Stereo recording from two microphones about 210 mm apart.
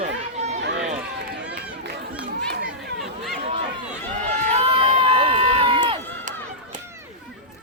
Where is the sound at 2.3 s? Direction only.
50° right (ahead or behind).